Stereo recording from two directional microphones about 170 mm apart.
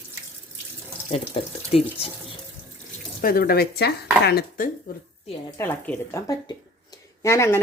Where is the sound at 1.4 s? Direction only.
35° left (ahead or behind).